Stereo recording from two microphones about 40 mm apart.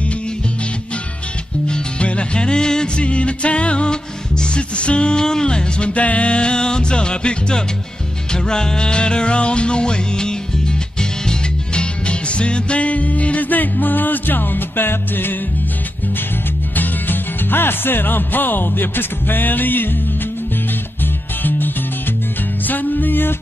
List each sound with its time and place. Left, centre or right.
1.7 s music: left
5.9 s music: left
16.7 s speech: left
21.4 s music: left